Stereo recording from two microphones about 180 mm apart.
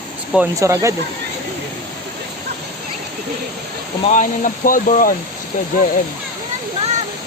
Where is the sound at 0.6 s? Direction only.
15° right (ahead or behind).